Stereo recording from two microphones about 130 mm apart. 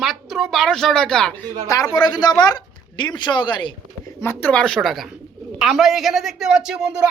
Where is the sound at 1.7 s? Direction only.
25° left (ahead or behind).